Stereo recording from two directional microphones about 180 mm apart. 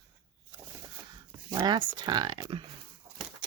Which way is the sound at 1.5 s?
25° right (ahead or behind).